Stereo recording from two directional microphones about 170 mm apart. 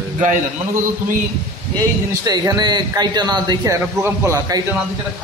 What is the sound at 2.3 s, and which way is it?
A man's voice, 25° right (ahead or behind).